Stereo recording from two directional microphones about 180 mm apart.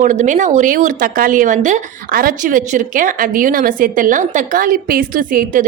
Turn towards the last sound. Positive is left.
turn(degrees=-50)  # may be behind; listen again after turning